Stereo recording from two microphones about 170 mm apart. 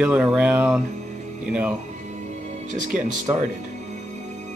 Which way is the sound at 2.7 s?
50° right (ahead or behind).